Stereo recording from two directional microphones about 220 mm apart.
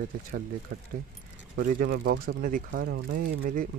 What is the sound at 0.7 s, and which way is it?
Speech, 40° right (ahead or behind).